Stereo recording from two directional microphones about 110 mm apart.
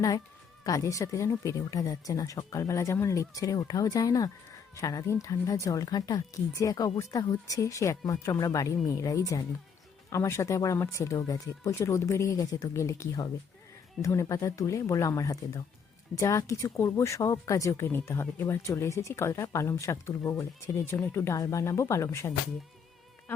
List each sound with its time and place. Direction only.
0.6 s speech: 30° left (ahead or behind)